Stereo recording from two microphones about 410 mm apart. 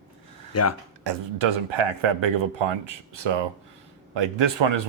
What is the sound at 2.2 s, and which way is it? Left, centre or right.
Speech, right.